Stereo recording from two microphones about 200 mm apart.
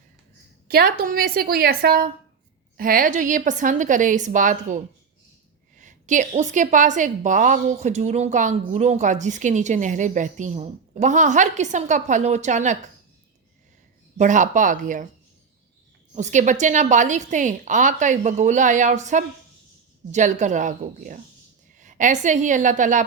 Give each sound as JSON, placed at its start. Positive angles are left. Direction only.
{"t": 0.7, "sound": "a woman's voice", "side_deg": -50}
{"t": 14.2, "sound": "a woman's voice", "side_deg": -35}
{"t": 16.1, "sound": "a woman's voice", "side_deg": -35}